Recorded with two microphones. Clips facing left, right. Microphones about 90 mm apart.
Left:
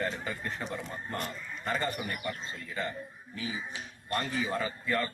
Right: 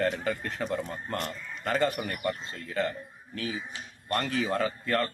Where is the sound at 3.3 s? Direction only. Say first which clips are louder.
Right 3 dB; 70° right (ahead or behind).